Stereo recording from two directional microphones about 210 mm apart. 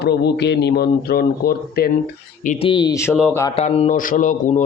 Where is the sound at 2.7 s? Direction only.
20° left (ahead or behind).